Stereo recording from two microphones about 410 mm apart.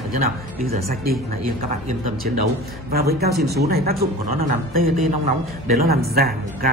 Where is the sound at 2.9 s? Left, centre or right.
Right.